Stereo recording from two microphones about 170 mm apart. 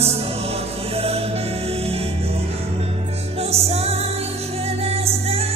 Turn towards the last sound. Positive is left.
turn(degrees=-35)  # may be behind; listen again after turning